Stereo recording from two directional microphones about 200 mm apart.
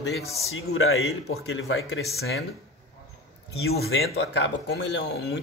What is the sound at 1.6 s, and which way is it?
Speech, 85° left.